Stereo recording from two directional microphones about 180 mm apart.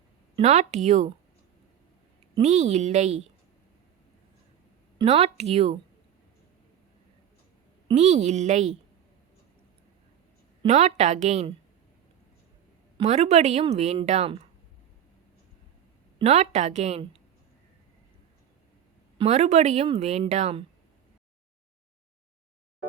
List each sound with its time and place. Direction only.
0.3 s a woman's voice: 40° right (ahead or behind)
2.3 s a woman's voice: 40° right (ahead or behind)
4.9 s a woman's voice: 35° right (ahead or behind)
7.9 s a woman's voice: 40° right (ahead or behind)
10.7 s a woman's voice: 40° right (ahead or behind)
13.0 s a woman's voice: 40° right (ahead or behind)
16.2 s a woman's voice: 35° right (ahead or behind)
19.2 s a woman's voice: 40° right (ahead or behind)